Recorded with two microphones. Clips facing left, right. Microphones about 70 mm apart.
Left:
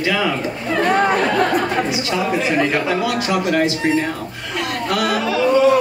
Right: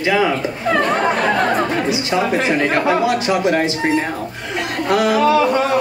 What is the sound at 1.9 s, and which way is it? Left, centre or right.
Speech, right.